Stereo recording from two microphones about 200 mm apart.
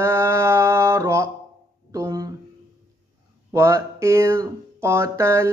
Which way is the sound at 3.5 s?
15° right (ahead or behind).